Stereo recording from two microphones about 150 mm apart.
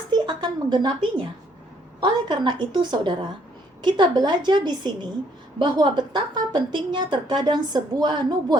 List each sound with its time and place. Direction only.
0.1 s speech: 30° right (ahead or behind)
2.0 s a woman's voice: 30° right (ahead or behind)